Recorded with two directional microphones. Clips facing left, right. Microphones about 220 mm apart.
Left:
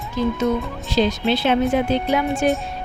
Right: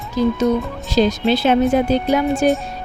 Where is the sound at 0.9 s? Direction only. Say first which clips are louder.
Right 3 dB; 45° right (ahead or behind).